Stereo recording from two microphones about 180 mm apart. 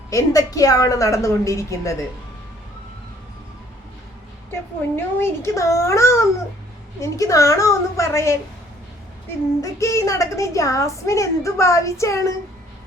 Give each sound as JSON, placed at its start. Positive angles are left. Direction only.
{"t": 0.1, "sound": "a woman's voice", "side_deg": 20}
{"t": 4.5, "sound": "a woman's voice", "side_deg": 15}
{"t": 9.6, "sound": "a woman's voice", "side_deg": 15}